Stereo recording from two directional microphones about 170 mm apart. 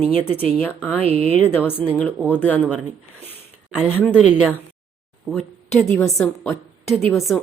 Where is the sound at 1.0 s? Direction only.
35° right (ahead or behind).